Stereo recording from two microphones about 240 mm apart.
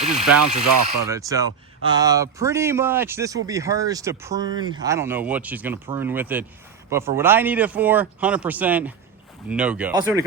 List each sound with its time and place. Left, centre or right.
0.0 s speech: right
1.0 s speech: centre